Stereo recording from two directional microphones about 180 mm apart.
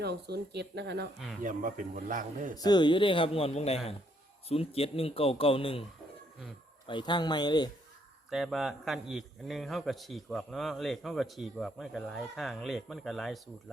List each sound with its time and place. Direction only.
0.0 s speech: 65° right (ahead or behind)
1.4 s speech: 45° right (ahead or behind)
2.6 s speech: 25° left (ahead or behind)
6.8 s speech: 25° left (ahead or behind)
8.3 s a man's voice: centre (ahead or behind)